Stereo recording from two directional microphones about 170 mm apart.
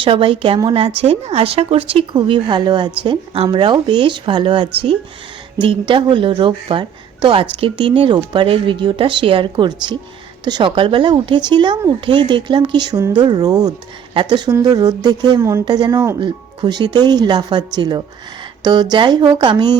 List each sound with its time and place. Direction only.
0.0 s a woman's voice: 30° right (ahead or behind)